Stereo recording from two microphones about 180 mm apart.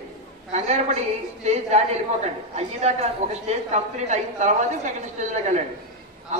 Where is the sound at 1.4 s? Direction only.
40° right (ahead or behind).